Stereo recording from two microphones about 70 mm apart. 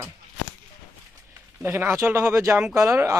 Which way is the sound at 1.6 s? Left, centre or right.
Right.